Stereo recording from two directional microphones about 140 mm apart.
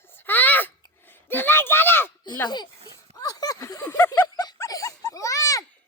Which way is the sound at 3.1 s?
25° left (ahead or behind).